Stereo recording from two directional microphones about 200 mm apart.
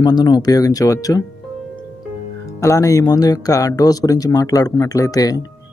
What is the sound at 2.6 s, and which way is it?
Speech, 15° left (ahead or behind).